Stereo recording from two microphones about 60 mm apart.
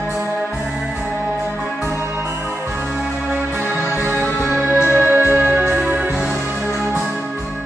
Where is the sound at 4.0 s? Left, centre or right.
Right.